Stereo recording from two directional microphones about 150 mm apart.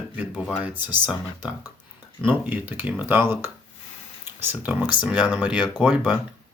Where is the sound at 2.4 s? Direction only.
10° right (ahead or behind).